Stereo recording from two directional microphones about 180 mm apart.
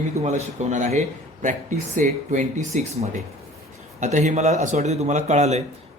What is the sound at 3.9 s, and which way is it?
A man's voice, 40° right (ahead or behind).